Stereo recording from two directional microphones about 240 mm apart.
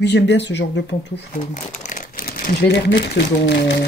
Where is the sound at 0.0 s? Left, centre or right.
Left.